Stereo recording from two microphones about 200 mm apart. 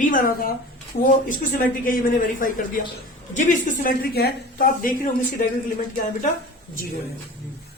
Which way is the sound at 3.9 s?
50° left (ahead or behind).